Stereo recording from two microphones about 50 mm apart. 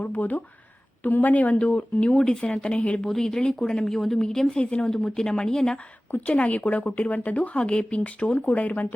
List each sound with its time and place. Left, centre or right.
0.0 s speech: left
3.1 s speech: centre
4.6 s speech: left
4.9 s speech: centre
6.2 s speech: left